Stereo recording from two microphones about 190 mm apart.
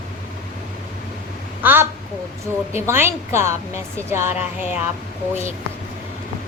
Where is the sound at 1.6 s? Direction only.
10° right (ahead or behind).